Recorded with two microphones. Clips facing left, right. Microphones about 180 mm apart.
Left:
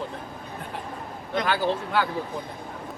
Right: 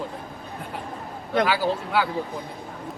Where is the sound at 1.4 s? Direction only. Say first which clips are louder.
Left 1 dB; 5° right (ahead or behind).